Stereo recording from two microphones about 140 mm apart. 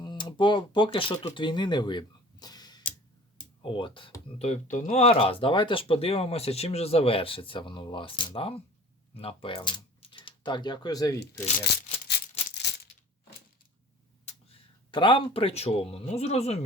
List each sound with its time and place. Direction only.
0.0 s speech: 30° left (ahead or behind)
4.4 s speech: 55° left (ahead or behind); by 11.4 s 25° left (ahead or behind)
14.8 s speech: 35° left (ahead or behind)